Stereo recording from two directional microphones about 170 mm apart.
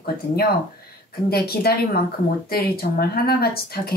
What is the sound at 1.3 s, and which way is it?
Speech, 65° left (ahead or behind).